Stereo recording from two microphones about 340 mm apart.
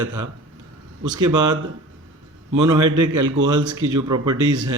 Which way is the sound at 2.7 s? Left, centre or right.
Right.